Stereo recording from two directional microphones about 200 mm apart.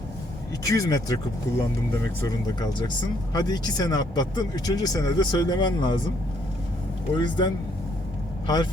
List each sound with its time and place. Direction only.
0.6 s speech: 15° left (ahead or behind)
7.2 s speech: 20° left (ahead or behind)